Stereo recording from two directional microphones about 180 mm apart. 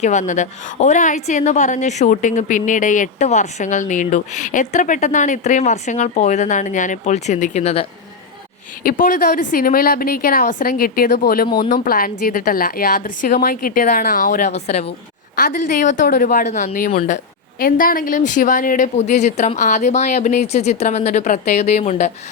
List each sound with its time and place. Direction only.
0.0 s a woman's voice: 40° left (ahead or behind)
8.8 s a woman's voice: 50° left (ahead or behind)
11.4 s speech: 25° left (ahead or behind)
11.7 s a woman's voice: 55° left (ahead or behind)
16.9 s speech: 35° left (ahead or behind)
17.6 s speech: 50° left (ahead or behind)